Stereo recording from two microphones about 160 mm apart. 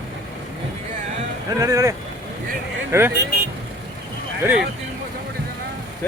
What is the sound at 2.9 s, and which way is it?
Speech, 15° right (ahead or behind).